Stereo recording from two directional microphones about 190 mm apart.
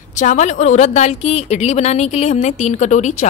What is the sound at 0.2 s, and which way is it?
A woman's voice, 40° left (ahead or behind).